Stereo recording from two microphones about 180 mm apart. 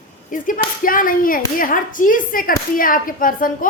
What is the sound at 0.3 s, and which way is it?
A woman's voice, 50° left (ahead or behind).